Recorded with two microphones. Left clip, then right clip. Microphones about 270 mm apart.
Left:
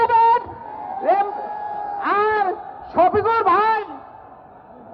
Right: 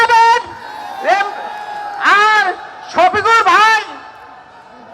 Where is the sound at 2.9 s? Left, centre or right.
Right.